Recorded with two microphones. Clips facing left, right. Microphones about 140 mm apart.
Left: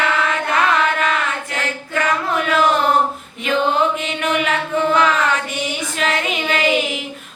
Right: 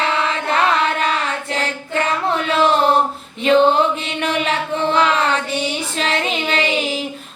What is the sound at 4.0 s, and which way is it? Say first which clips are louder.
Chant: left 1 dB; 30° right (ahead or behind).